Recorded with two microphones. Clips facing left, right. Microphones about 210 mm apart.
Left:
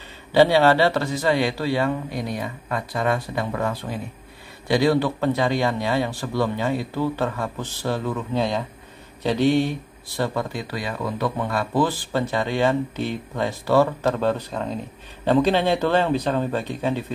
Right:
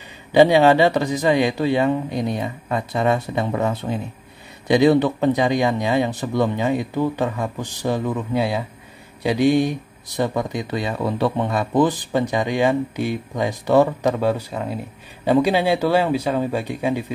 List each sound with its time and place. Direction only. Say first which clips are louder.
0.3 s speech: right 3 dB; 15° right (ahead or behind)